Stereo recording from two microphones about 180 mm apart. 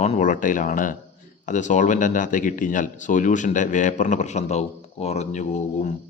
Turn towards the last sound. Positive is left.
turn(degrees=40)  # may be behind; listen again after turning